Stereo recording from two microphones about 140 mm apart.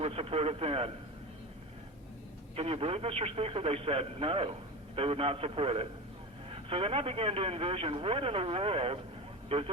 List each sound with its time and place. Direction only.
0.0 s speech: 45° right (ahead or behind)
2.6 s speech: 45° right (ahead or behind)